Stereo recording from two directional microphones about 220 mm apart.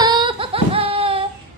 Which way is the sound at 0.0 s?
20° right (ahead or behind).